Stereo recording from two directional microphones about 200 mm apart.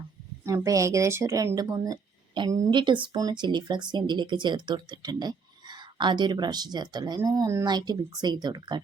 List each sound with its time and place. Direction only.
0.4 s speech: 15° right (ahead or behind)